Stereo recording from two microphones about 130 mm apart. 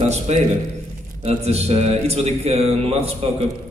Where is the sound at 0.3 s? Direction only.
55° right (ahead or behind).